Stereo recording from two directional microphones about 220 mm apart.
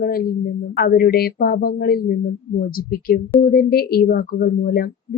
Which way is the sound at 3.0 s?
40° left (ahead or behind).